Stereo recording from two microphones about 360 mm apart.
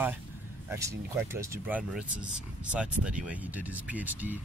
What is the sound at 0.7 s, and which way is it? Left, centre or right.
Speech, centre.